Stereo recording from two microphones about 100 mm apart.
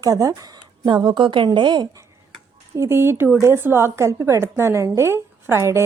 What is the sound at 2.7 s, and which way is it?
A woman's voice, 30° right (ahead or behind).